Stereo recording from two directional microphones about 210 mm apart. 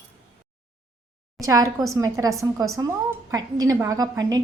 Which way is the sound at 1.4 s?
15° right (ahead or behind).